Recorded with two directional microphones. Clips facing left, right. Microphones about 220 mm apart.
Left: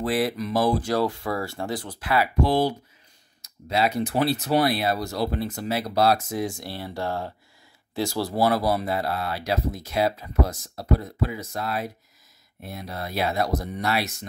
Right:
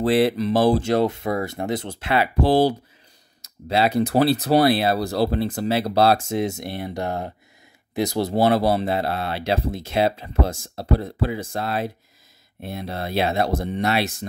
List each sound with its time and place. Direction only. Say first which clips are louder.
0.0 s speech: right 6 dB; 25° right (ahead or behind)